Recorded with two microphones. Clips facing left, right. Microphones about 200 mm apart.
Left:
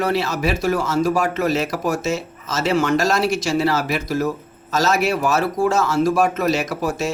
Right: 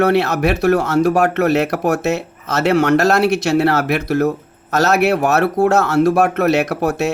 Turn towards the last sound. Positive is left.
turn(degrees=-65)  # may be behind; listen again after turning